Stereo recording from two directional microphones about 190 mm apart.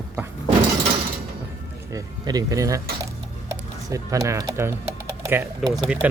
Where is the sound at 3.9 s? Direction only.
15° right (ahead or behind).